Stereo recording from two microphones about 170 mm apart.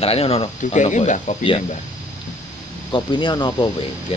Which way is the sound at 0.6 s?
45° left (ahead or behind).